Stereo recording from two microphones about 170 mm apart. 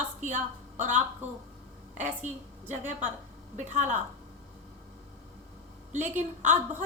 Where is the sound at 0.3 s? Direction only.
45° right (ahead or behind).